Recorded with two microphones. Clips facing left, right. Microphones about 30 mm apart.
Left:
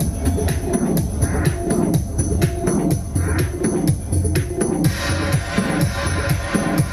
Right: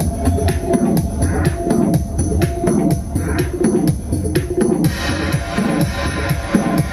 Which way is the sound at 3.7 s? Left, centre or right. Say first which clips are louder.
Right 4 dB; right.